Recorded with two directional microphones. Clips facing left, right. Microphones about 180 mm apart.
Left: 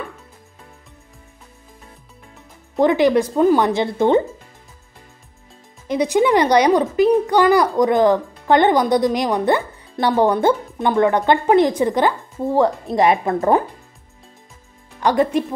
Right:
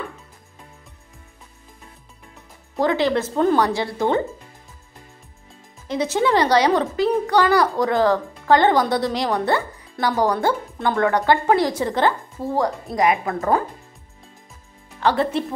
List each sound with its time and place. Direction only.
2.8 s a child's voice: 15° left (ahead or behind)
5.9 s a child's voice: 15° left (ahead or behind)
12.8 s speech: 30° left (ahead or behind)
15.0 s a woman's voice: 15° left (ahead or behind)